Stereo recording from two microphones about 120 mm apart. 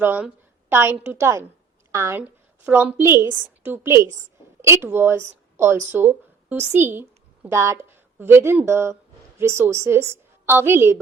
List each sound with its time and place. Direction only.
0.0 s a woman's voice: 15° right (ahead or behind)
2.2 s a woman's voice: 10° right (ahead or behind)